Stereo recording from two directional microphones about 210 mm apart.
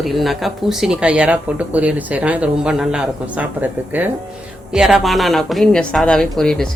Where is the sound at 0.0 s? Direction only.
Centre (ahead or behind).